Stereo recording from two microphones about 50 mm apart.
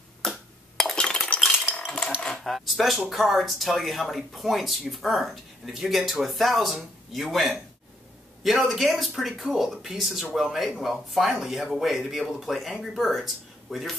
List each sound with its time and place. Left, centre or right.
0.9 s a sound: centre
1.9 s cutlery: centre
2.3 s speech: centre